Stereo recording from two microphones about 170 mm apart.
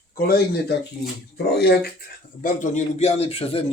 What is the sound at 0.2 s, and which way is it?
Speech, 70° left (ahead or behind).